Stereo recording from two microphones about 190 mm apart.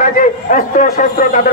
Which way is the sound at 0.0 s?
45° left (ahead or behind).